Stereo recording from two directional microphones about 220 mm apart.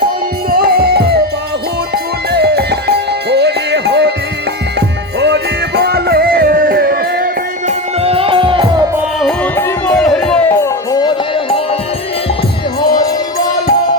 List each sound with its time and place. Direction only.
0.5 s music: 45° right (ahead or behind)
2.3 s music: 50° right (ahead or behind)
5.2 s music: 50° right (ahead or behind)
8.0 s music: 25° right (ahead or behind)
9.2 s music: 5° left (ahead or behind)